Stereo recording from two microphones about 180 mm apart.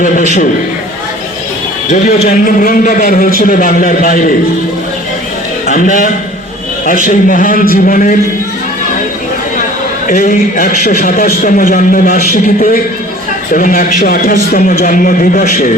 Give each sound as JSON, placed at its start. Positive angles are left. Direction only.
{"t": 2.2, "sound": "a man's voice", "side_deg": 50}
{"t": 5.6, "sound": "a man's voice", "side_deg": 45}
{"t": 10.1, "sound": "a man's voice", "side_deg": 50}